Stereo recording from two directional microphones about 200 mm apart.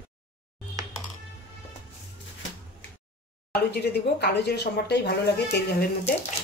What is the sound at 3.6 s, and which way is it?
Speech, 55° left (ahead or behind).